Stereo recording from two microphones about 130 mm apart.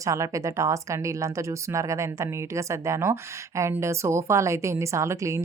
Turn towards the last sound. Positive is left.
turn(degrees=-20)  # may be behind; listen again after turning